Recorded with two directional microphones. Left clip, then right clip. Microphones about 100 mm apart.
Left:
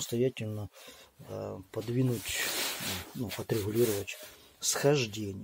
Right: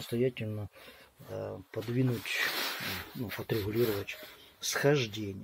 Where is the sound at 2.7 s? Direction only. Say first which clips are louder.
Even; 90° left.